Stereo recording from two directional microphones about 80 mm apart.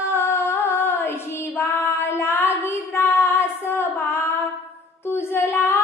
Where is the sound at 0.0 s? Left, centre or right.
Left.